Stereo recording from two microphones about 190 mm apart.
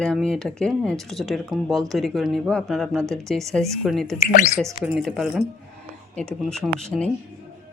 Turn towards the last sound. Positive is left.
turn(degrees=5)  # may be behind; listen again after turning